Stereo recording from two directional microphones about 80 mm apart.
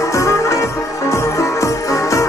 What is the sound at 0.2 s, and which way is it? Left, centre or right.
Music, left.